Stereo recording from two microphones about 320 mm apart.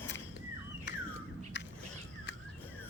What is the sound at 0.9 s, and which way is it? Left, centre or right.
Bird, left.